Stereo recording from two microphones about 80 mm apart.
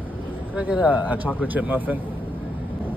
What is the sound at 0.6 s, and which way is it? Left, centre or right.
A man's voice, centre.